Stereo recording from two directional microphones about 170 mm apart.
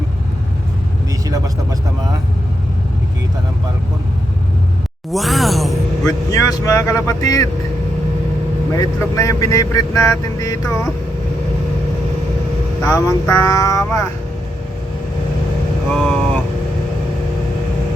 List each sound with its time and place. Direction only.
5.1 s a sound: centre (ahead or behind)
6.1 s speech: 20° left (ahead or behind)
8.7 s speech: 20° left (ahead or behind)
12.8 s speech: 20° left (ahead or behind)
15.9 s vehicle: centre (ahead or behind)